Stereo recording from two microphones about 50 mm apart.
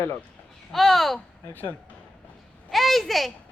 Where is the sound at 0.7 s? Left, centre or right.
Centre.